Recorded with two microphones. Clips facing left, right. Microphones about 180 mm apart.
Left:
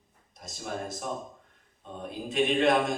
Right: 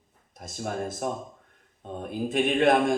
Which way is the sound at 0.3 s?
50° right (ahead or behind).